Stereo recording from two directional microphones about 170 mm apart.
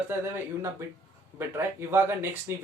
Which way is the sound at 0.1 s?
15° right (ahead or behind).